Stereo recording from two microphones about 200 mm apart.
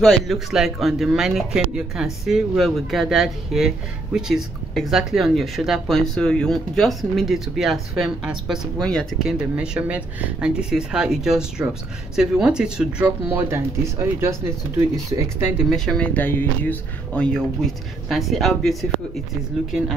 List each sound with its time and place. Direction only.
0.0 s speech: centre (ahead or behind)